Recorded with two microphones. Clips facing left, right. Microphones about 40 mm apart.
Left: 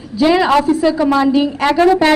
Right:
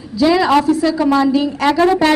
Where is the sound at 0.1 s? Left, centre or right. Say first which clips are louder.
Left 1 dB; left.